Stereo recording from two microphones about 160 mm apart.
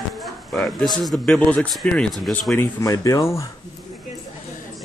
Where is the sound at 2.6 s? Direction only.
20° left (ahead or behind).